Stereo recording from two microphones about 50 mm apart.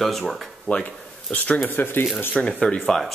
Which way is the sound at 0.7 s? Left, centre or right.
Left.